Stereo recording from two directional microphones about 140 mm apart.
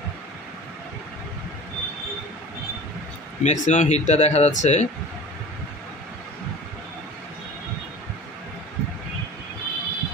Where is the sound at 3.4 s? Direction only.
60° left (ahead or behind).